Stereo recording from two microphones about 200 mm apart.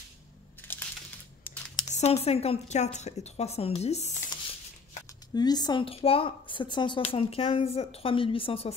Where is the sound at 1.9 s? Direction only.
30° left (ahead or behind).